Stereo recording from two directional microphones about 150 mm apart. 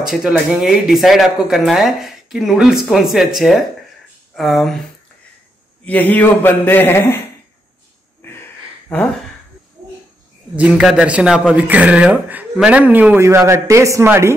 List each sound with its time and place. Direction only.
0.0 s speech: 5° right (ahead or behind)
4.4 s speech: centre (ahead or behind)
5.9 s a man's voice: 10° left (ahead or behind)
8.2 s a sound: 15° left (ahead or behind)
10.5 s speech: 5° right (ahead or behind)